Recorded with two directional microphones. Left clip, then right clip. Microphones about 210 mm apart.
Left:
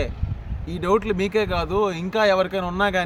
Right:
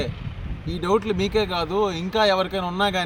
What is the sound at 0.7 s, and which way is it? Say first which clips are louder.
Speech: left 1 dB; 25° left (ahead or behind).